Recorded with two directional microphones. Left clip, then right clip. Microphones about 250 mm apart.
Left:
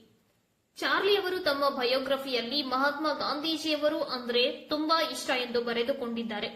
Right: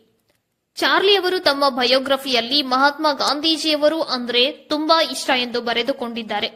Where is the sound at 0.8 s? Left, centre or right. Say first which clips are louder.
Right 11 dB; right.